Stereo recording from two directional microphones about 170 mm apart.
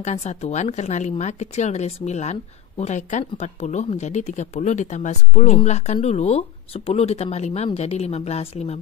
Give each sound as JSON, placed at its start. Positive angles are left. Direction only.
{"t": 0.0, "sound": "speech", "side_deg": 40}